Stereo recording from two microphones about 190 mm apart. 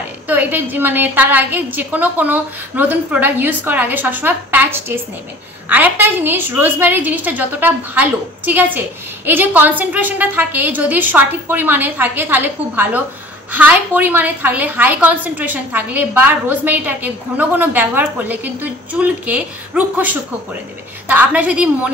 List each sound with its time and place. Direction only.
0.3 s a woman's voice: 10° right (ahead or behind)